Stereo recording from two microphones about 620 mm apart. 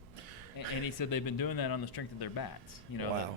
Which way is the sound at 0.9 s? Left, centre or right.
Left.